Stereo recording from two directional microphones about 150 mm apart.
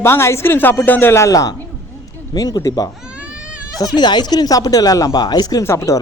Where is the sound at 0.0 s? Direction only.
15° left (ahead or behind).